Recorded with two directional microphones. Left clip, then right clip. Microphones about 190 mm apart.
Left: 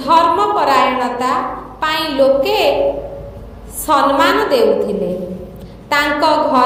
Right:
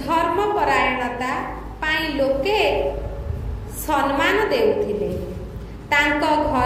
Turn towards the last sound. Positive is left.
turn(degrees=40)  # may be behind; listen again after turning